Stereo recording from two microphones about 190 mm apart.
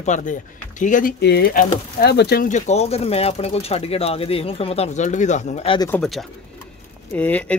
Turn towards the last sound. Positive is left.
turn(degrees=5)  # may be behind; listen again after turning